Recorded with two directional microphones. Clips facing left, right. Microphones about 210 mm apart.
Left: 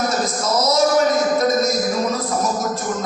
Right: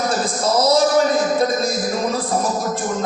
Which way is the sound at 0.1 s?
30° right (ahead or behind).